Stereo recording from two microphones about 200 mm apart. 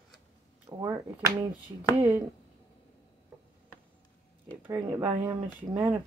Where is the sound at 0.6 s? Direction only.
15° right (ahead or behind).